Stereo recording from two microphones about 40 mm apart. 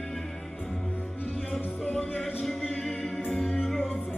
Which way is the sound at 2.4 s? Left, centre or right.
Centre.